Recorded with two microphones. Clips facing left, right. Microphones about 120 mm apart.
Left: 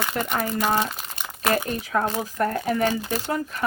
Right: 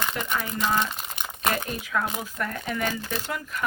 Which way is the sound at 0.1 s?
45° left (ahead or behind).